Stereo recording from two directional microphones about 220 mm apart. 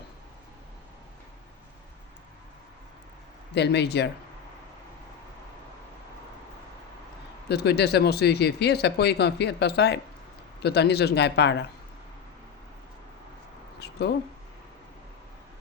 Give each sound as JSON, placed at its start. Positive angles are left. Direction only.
{"t": 3.5, "sound": "speech", "side_deg": 50}
{"t": 7.4, "sound": "speech", "side_deg": 50}
{"t": 13.7, "sound": "a sound", "side_deg": 50}